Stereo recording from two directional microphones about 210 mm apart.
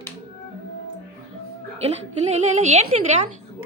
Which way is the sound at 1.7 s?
30° right (ahead or behind).